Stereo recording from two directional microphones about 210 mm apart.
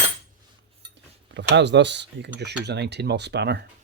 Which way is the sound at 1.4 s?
55° right (ahead or behind).